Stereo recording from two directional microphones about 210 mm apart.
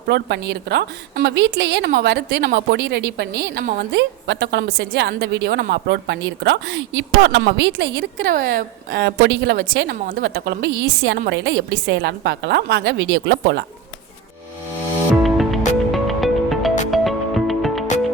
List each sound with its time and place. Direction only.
0.1 s a woman's voice: 55° right (ahead or behind)
15.1 s music: centre (ahead or behind)